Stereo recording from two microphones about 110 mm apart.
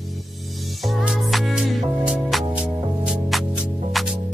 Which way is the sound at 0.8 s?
5° right (ahead or behind).